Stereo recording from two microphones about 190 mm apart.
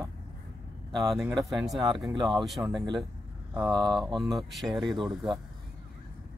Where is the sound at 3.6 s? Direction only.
25° right (ahead or behind).